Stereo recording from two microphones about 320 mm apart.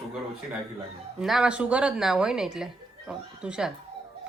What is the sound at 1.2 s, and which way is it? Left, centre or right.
Speech, centre.